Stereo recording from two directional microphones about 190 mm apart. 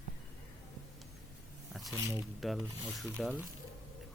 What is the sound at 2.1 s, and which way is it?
Speech, centre (ahead or behind).